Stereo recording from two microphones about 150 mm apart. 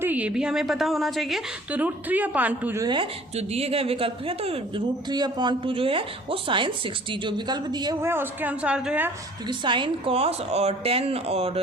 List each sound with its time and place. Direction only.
0.0 s a woman's voice: 10° right (ahead or behind)
1.7 s a woman's voice: 10° right (ahead or behind)
2.8 s speech: 35° right (ahead or behind)
5.0 s speech: 30° right (ahead or behind)
8.0 s a woman's voice: 15° right (ahead or behind)
9.5 s speech: 30° right (ahead or behind)